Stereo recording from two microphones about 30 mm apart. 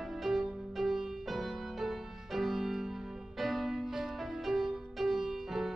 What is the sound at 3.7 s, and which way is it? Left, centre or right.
Music, centre.